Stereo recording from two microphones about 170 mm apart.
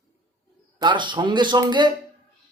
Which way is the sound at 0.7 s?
25° right (ahead or behind).